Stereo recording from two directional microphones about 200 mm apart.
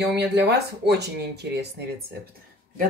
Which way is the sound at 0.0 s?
55° right (ahead or behind).